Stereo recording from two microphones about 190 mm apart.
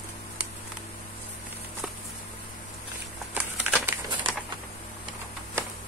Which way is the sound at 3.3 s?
10° right (ahead or behind).